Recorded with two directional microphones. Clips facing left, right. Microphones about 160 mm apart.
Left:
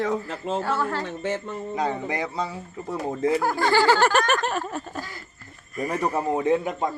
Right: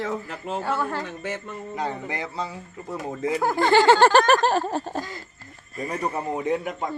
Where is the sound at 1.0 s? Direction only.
30° left (ahead or behind).